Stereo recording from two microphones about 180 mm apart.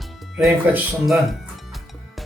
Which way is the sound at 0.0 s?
5° right (ahead or behind).